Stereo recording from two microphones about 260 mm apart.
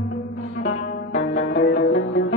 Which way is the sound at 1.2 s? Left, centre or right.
Left.